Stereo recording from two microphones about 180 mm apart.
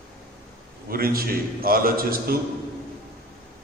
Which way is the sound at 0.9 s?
55° right (ahead or behind).